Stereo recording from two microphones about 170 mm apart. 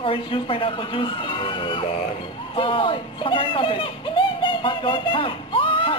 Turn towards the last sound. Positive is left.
turn(degrees=30)  # may be behind; listen again after turning